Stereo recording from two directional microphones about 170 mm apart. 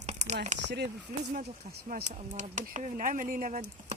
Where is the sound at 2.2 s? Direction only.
45° right (ahead or behind).